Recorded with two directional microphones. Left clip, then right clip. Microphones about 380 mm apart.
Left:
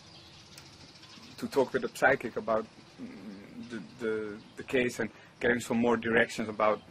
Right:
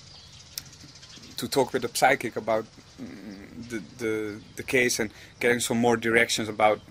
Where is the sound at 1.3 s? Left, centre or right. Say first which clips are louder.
Right 4 dB; right.